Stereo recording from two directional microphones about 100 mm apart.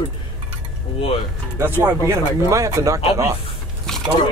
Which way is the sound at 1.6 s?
20° right (ahead or behind).